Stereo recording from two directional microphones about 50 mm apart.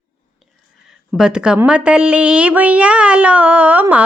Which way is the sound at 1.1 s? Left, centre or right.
Centre.